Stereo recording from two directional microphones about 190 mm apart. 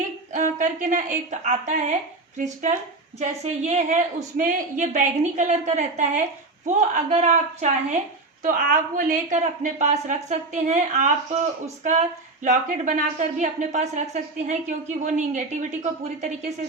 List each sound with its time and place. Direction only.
0.3 s a woman's voice: 40° right (ahead or behind)